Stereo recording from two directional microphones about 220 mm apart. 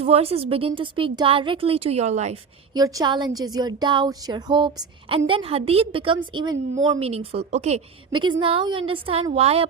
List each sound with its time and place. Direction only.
0.0 s speech: 25° right (ahead or behind)
2.7 s speech: 15° right (ahead or behind)